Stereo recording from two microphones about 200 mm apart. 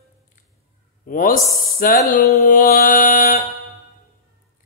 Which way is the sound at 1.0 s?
45° left (ahead or behind).